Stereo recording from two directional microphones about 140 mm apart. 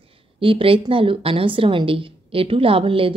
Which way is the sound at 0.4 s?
40° right (ahead or behind).